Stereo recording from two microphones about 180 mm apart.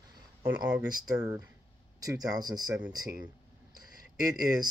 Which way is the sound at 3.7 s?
50° left (ahead or behind).